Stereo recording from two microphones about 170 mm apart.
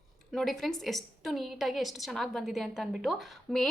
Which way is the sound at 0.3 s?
Centre (ahead or behind).